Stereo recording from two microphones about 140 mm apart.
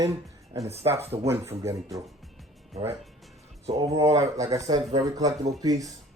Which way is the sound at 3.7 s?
25° right (ahead or behind).